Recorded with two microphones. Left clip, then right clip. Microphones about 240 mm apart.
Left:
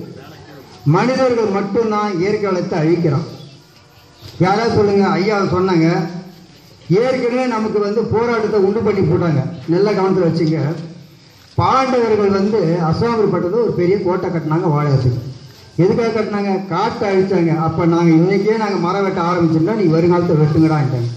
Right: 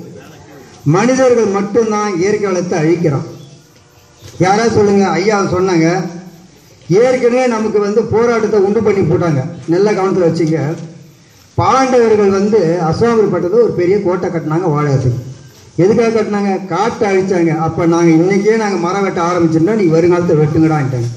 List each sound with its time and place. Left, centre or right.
0.8 s a man's voice: right
4.4 s a man's voice: right